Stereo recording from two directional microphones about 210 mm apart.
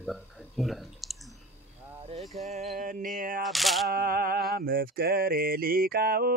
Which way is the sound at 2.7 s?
40° right (ahead or behind).